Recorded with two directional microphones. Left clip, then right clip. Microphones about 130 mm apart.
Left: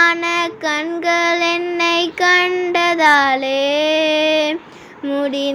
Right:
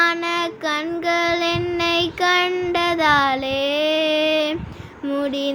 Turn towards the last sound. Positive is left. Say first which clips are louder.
# left 3 dB
turn(degrees=20)  # may be behind; listen again after turning